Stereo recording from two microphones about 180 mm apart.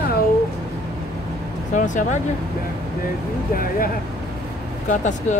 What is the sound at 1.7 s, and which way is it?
Speech, 45° left (ahead or behind).